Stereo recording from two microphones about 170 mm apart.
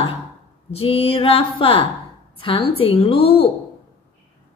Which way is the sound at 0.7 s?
35° left (ahead or behind).